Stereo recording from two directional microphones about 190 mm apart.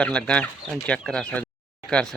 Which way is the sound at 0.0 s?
5° left (ahead or behind).